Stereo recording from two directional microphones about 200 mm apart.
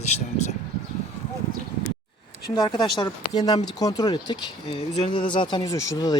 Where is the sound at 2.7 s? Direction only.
20° left (ahead or behind).